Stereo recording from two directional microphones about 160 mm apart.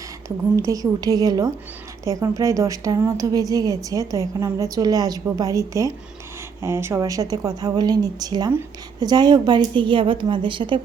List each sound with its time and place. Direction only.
0.5 s a woman's voice: 20° right (ahead or behind)